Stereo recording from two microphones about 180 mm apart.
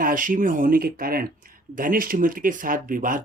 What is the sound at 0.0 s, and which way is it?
Speech, 50° right (ahead or behind).